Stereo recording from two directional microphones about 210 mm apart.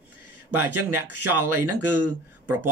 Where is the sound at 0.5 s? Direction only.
90° right.